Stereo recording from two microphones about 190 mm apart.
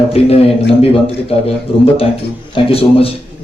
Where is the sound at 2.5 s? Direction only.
30° left (ahead or behind).